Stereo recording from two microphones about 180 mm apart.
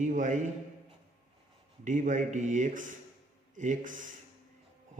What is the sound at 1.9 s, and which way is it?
A man's voice, 45° right (ahead or behind).